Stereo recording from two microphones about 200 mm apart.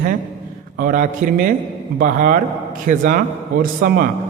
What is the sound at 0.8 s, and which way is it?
A man's voice, 40° right (ahead or behind).